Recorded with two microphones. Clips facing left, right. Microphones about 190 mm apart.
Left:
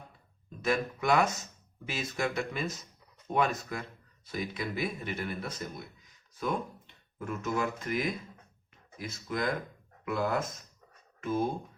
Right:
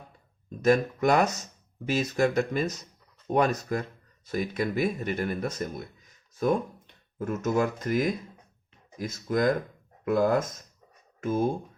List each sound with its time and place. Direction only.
0.6 s speech: 40° right (ahead or behind)